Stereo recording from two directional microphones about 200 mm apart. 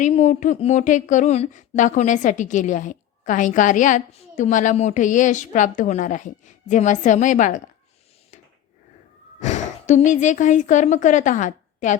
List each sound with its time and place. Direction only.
0.0 s speech: 35° left (ahead or behind)
9.4 s a woman's voice: 35° left (ahead or behind)